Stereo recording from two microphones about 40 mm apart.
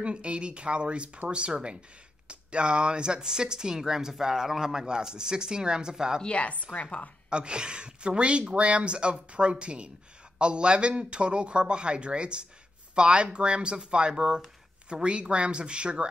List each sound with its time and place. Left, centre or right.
0.0 s speech: right
6.2 s a woman's voice: left
7.2 s speech: right